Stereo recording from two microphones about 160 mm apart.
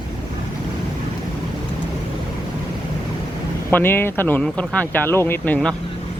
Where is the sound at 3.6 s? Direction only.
15° left (ahead or behind).